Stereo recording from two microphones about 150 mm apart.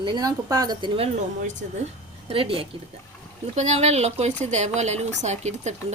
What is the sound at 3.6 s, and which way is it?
A woman's voice, 50° right (ahead or behind).